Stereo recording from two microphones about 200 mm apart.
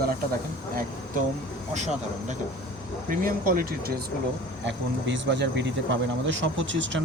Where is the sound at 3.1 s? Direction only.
45° right (ahead or behind).